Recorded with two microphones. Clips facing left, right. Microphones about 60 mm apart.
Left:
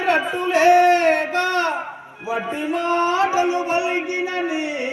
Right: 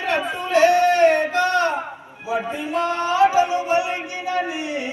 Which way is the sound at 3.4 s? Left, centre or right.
Left.